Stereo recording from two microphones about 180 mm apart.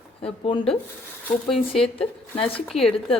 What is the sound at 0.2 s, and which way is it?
Speech, 30° left (ahead or behind).